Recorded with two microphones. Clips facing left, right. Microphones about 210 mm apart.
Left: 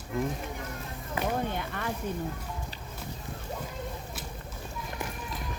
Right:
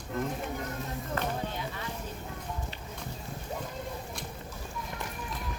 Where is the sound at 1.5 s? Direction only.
60° left (ahead or behind).